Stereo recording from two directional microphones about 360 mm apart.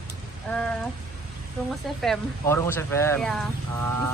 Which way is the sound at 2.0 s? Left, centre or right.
Centre.